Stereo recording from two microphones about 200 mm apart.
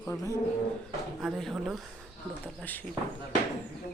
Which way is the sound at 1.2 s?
Centre (ahead or behind).